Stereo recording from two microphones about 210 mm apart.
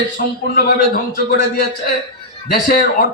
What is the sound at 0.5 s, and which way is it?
A man's voice, 45° left (ahead or behind).